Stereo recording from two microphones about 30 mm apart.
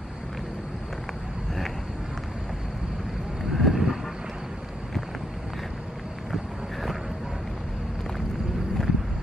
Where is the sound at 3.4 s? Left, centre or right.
Centre.